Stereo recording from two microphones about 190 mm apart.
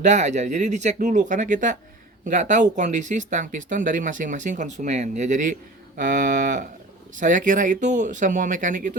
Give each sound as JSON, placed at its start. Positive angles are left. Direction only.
{"t": 0.0, "sound": "speech", "side_deg": -40}